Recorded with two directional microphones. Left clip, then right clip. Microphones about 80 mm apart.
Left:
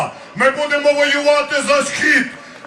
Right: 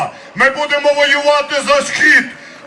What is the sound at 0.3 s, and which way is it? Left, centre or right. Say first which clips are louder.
A man's voice: right 2 dB; right.